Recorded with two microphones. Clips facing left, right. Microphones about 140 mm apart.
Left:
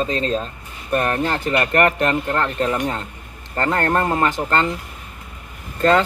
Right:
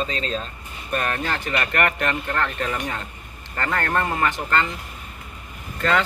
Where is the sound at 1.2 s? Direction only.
30° left (ahead or behind).